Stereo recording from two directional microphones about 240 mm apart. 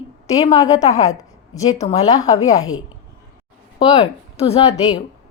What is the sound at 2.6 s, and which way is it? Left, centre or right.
Speech, left.